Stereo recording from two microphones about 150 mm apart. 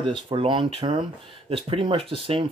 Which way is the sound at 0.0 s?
35° right (ahead or behind).